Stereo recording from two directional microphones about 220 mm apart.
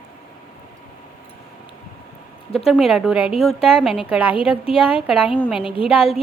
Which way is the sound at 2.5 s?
Centre (ahead or behind).